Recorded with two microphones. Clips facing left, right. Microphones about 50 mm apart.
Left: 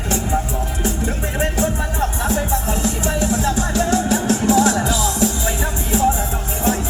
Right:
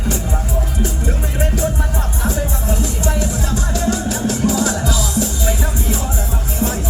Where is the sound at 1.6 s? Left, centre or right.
Left.